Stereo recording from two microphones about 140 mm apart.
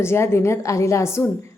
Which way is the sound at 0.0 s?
20° left (ahead or behind).